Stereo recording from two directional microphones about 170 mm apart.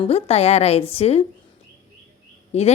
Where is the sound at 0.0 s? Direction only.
35° left (ahead or behind).